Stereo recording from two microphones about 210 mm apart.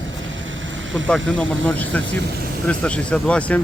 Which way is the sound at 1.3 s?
5° left (ahead or behind).